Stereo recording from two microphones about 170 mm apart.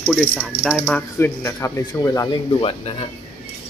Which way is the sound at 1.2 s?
15° left (ahead or behind).